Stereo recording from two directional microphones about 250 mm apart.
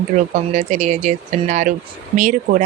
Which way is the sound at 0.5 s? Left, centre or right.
Right.